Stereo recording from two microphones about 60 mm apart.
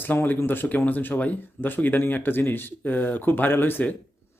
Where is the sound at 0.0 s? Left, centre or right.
Left.